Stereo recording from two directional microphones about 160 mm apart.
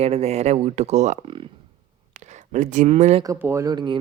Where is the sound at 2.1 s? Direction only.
45° right (ahead or behind).